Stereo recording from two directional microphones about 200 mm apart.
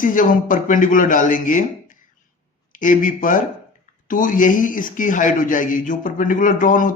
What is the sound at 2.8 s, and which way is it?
Speech, 40° left (ahead or behind).